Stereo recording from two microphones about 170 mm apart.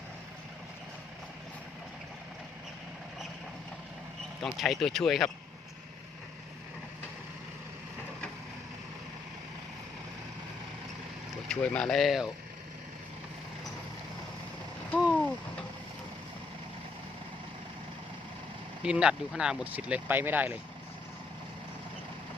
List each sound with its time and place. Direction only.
4.5 s speech: centre (ahead or behind)
11.4 s speech: 5° left (ahead or behind)
15.1 s a sound: 5° left (ahead or behind)
18.8 s speech: 5° right (ahead or behind)